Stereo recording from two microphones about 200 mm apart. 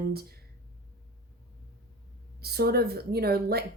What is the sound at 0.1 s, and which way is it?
Speech, 50° right (ahead or behind).